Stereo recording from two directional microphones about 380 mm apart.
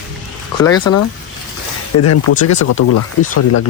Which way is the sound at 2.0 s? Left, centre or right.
Left.